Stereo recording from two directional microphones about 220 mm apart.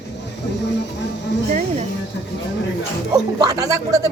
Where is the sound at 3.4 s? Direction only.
15° right (ahead or behind).